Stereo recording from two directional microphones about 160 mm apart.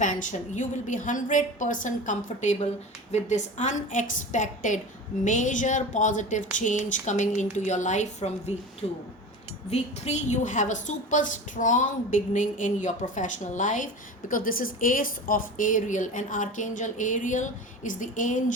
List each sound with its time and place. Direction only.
0.0 s a woman's voice: 50° left (ahead or behind)